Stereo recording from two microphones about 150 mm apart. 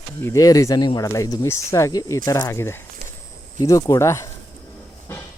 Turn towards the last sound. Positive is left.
turn(degrees=20)  # may be behind; listen again after turning